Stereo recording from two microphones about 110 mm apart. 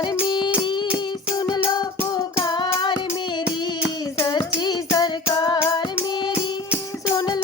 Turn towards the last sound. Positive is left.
turn(degrees=40)  # may be behind; listen again after turning